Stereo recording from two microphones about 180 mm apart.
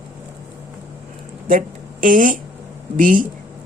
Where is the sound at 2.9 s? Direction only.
50° right (ahead or behind).